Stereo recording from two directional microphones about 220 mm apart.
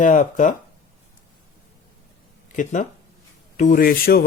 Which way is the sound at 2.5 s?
35° left (ahead or behind).